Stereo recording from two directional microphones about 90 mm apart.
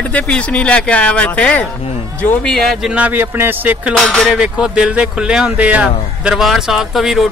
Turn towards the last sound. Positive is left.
turn(degrees=0)  # may be behind; listen again after turning